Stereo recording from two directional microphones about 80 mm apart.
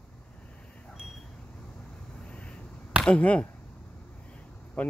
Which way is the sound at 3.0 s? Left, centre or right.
Centre.